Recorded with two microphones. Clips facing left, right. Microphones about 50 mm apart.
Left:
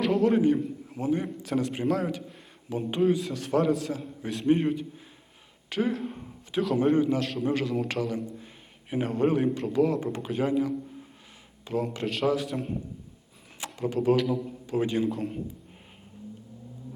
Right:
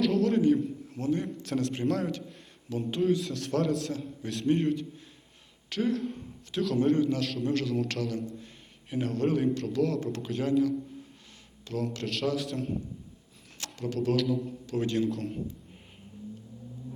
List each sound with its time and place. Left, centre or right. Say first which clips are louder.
0.0 s a man's voice: left 2 dB; centre
7.2 s a man's voice: left 2 dB; centre
13.7 s a man's voice: left 4 dB; centre